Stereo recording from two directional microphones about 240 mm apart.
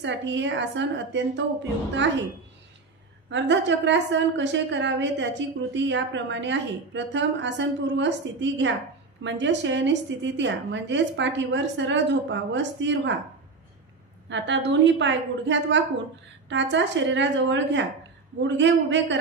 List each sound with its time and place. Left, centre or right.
0.0 s a woman's voice: right
3.3 s a woman's voice: right
14.3 s a woman's voice: right